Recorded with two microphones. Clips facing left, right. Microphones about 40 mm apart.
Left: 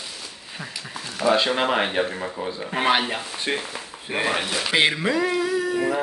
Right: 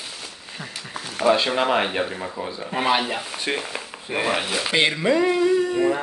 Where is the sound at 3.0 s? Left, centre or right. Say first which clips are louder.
Even; centre.